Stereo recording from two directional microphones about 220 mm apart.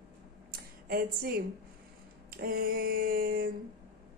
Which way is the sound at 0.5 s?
45° right (ahead or behind).